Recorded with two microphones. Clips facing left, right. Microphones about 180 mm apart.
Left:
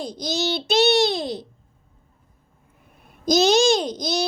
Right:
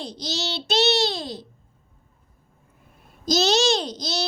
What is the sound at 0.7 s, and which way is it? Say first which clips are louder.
Babbling: left 3 dB; 15° left (ahead or behind).